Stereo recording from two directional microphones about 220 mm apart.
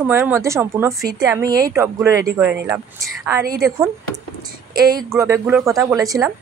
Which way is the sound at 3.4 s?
40° right (ahead or behind).